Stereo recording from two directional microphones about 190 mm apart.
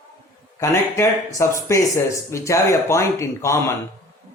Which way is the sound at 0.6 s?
15° left (ahead or behind).